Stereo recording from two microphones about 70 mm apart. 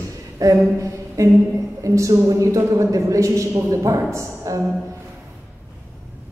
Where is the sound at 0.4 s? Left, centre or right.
Right.